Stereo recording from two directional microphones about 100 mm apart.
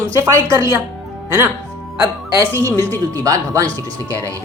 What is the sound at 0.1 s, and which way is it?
Speech, 30° right (ahead or behind).